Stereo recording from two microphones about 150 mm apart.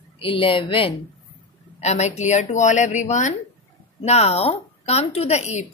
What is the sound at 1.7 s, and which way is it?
A woman's voice, 45° left (ahead or behind).